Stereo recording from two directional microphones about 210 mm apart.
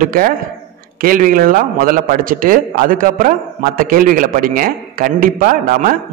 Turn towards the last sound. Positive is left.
turn(degrees=-45)  # may be behind; listen again after turning